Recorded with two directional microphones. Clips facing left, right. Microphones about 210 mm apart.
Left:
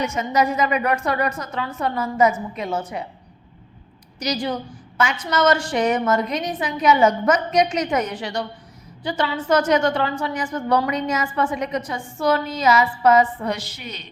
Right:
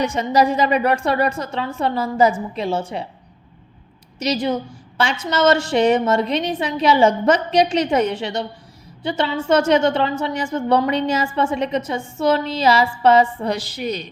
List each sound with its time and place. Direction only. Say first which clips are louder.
0.0 s a woman's voice: right 3 dB; 35° right (ahead or behind)
4.2 s a woman's voice: right 4 dB; 25° right (ahead or behind)